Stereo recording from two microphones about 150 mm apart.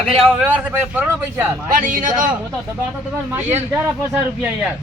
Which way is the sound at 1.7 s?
65° right (ahead or behind).